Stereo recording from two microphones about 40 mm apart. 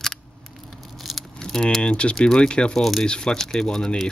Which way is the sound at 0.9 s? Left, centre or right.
Centre.